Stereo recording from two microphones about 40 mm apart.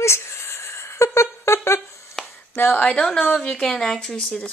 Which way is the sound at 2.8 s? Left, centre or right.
Left.